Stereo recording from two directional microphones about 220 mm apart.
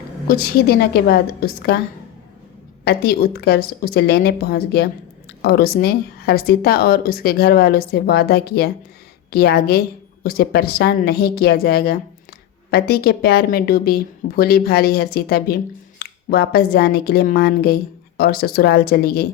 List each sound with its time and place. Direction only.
0.3 s speech: 45° left (ahead or behind)
2.8 s speech: 45° left (ahead or behind)